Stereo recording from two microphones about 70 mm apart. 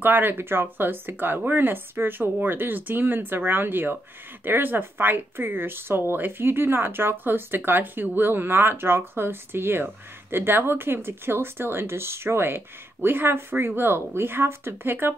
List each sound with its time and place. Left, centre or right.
0.0 s speech: right